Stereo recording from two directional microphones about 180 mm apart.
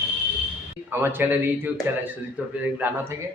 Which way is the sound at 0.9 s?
10° right (ahead or behind).